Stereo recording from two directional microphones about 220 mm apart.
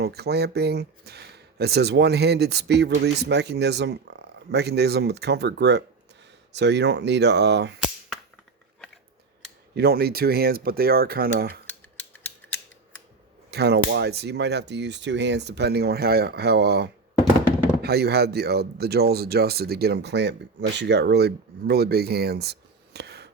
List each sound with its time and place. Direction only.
0.0 s speech: 45° right (ahead or behind)
9.7 s speech: 45° right (ahead or behind)
13.5 s speech: 50° right (ahead or behind)